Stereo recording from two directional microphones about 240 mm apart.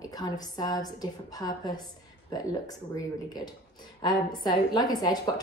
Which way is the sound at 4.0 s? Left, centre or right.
Centre.